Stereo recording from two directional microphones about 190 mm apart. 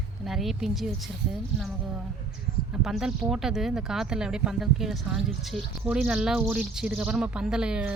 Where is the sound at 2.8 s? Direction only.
Centre (ahead or behind).